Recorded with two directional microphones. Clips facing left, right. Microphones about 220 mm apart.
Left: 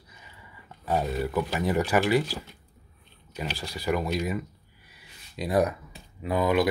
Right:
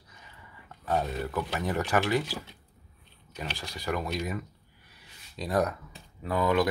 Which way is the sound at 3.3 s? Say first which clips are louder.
Left 4 dB; 5° left (ahead or behind).